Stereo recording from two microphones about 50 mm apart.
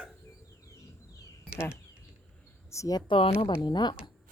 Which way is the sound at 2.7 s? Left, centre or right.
Left.